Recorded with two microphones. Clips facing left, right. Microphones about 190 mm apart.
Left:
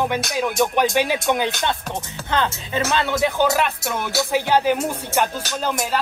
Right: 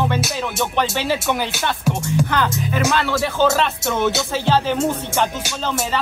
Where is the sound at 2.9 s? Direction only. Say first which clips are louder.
Even; 20° left (ahead or behind).